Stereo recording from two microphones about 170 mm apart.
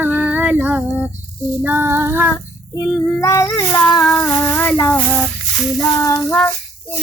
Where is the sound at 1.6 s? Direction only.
10° right (ahead or behind).